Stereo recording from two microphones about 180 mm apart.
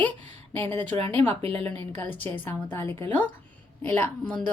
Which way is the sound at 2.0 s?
10° left (ahead or behind).